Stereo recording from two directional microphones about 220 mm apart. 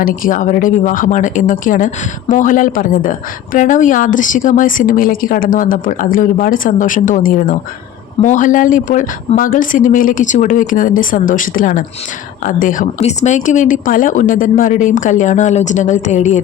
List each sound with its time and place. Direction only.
0.0 s a woman's voice: 40° left (ahead or behind)